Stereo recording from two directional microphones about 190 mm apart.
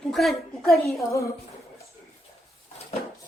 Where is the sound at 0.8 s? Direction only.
15° left (ahead or behind).